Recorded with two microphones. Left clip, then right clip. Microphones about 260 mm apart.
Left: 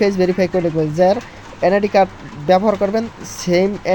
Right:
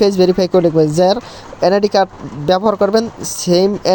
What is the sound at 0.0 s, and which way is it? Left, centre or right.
Speech, right.